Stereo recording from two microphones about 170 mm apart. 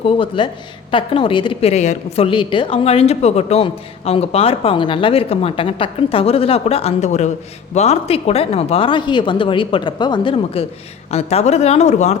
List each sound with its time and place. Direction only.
0.0 s speech: 30° left (ahead or behind)